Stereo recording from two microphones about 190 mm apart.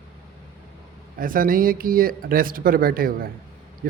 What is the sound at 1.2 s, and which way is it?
Speech, 45° right (ahead or behind).